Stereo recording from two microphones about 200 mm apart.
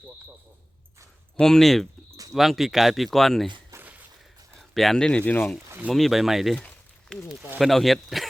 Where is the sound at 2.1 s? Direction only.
15° right (ahead or behind).